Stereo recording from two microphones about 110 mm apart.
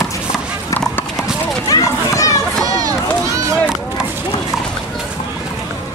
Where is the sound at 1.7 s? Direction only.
30° left (ahead or behind).